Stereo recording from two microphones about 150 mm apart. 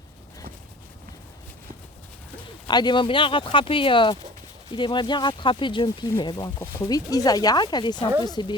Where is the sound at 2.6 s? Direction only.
30° left (ahead or behind).